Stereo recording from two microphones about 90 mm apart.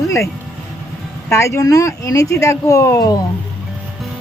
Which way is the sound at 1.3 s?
35° left (ahead or behind).